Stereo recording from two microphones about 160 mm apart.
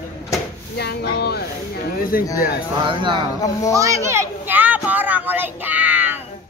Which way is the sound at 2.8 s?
30° right (ahead or behind).